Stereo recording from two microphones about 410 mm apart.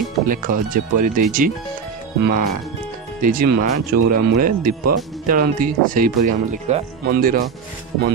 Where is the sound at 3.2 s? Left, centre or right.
Centre.